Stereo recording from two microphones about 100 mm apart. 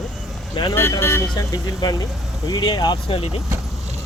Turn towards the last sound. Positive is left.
turn(degrees=85)